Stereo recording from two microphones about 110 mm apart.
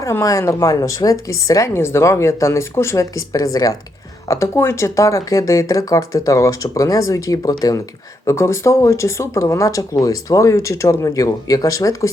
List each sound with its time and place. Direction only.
0.0 s speech: 30° left (ahead or behind)